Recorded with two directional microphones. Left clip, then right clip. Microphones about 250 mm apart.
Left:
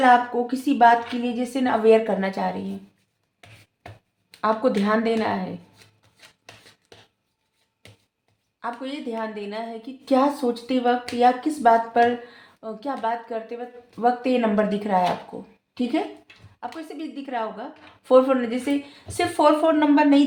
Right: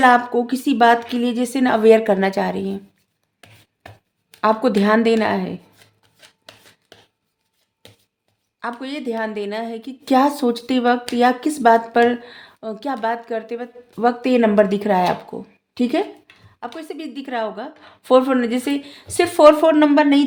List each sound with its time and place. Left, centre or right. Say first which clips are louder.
0.0 s a woman's voice: right 3 dB; right
4.4 s a woman's voice: right 5 dB; right
8.6 s a woman's voice: right 4 dB; right